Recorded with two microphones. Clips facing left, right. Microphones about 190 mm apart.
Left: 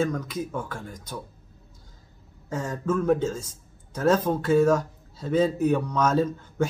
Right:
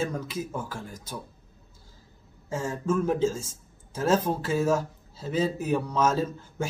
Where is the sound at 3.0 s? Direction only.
5° right (ahead or behind).